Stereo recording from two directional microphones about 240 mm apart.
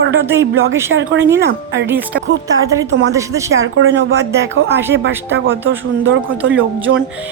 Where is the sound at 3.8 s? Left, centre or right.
Right.